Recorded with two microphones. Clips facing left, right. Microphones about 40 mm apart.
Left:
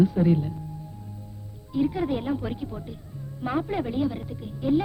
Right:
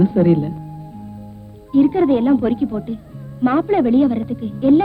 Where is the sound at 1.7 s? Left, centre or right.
Right.